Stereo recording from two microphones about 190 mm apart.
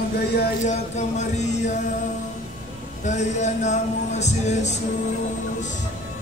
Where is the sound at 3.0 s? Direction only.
40° left (ahead or behind).